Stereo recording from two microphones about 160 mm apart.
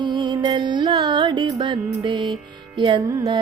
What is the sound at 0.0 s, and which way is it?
Music, 30° right (ahead or behind).